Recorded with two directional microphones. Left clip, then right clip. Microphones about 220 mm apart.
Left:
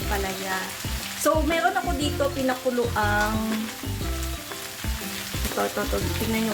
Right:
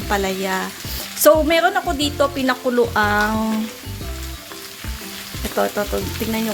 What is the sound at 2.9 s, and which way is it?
Frying, 50° right (ahead or behind).